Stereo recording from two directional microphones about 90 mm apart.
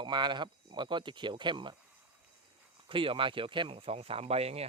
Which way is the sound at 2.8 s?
80° right.